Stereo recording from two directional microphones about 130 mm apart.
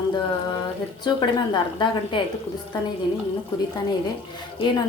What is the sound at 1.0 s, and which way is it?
A woman's voice, 35° left (ahead or behind).